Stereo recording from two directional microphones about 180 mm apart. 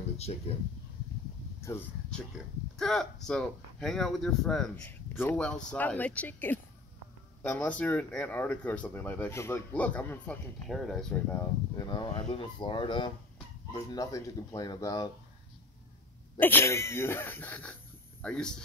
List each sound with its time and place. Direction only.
0.2 s speech: 35° left (ahead or behind)
1.6 s speech: 15° left (ahead or behind)
2.0 s speech: 5° left (ahead or behind)
11.7 s speech: 25° left (ahead or behind)
16.3 s speech: 10° left (ahead or behind)